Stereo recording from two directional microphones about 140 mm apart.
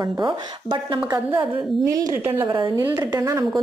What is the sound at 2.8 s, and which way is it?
Speech, 15° right (ahead or behind).